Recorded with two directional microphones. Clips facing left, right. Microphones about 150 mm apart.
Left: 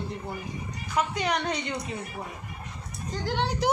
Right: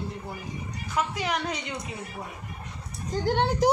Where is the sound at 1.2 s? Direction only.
5° right (ahead or behind).